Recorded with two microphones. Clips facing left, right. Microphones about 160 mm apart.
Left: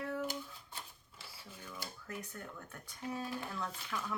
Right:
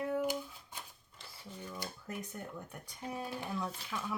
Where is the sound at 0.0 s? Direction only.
15° right (ahead or behind).